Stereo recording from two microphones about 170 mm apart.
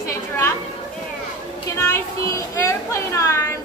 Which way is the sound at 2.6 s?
20° left (ahead or behind).